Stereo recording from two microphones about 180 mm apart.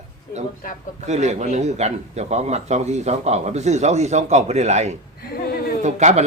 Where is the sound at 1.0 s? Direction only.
40° right (ahead or behind).